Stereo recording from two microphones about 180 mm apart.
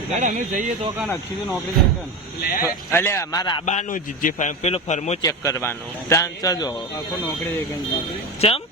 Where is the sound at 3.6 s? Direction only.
40° left (ahead or behind).